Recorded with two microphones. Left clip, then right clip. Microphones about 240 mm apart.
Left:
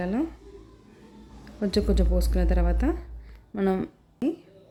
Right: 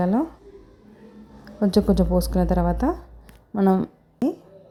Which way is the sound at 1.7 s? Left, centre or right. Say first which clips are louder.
Right 6 dB; centre.